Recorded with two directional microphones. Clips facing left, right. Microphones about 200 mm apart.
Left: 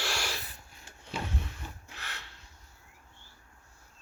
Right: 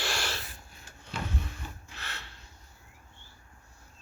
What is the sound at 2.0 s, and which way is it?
Gasp, 15° left (ahead or behind).